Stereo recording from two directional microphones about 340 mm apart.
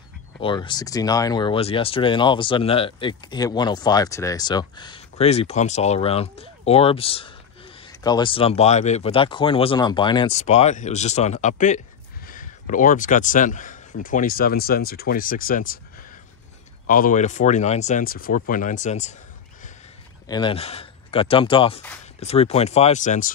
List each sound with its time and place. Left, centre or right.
0.4 s speech: centre
16.8 s speech: left
20.2 s speech: centre